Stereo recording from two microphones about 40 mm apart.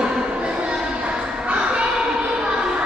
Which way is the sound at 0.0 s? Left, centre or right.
Right.